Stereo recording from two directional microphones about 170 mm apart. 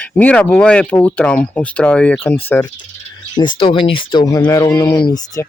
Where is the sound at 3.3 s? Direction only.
25° left (ahead or behind).